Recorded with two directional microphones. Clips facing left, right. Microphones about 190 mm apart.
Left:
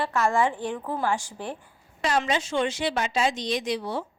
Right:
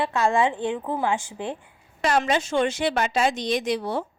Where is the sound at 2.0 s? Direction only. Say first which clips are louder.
Right 3 dB; 55° right (ahead or behind).